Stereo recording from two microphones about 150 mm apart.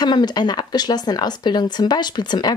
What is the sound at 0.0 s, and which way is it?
Speech, 30° left (ahead or behind).